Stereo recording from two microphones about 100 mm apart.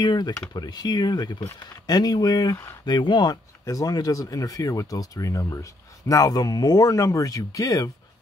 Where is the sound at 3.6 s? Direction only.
35° left (ahead or behind).